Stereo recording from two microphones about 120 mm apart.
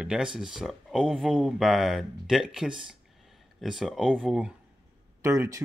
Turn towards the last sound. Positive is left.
turn(degrees=-25)  # may be behind; listen again after turning